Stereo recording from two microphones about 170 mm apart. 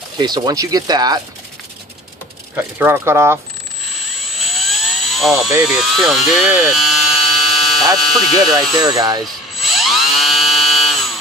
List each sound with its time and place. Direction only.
0.2 s speech: 25° right (ahead or behind)
2.6 s speech: 10° right (ahead or behind)
4.4 s a sound: centre (ahead or behind)
7.9 s speech: centre (ahead or behind)
8.8 s speech: 20° right (ahead or behind)
9.2 s electric toothbrush: centre (ahead or behind)